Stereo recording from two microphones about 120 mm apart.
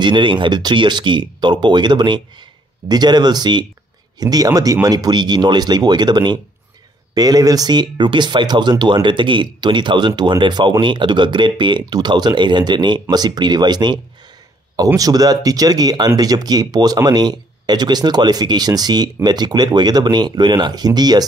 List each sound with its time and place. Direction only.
0.0 s speech: 40° right (ahead or behind)
15.0 s speech: 30° right (ahead or behind)